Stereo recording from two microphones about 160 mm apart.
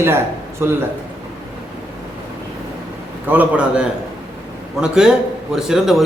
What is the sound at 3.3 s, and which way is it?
A man's voice, 10° right (ahead or behind).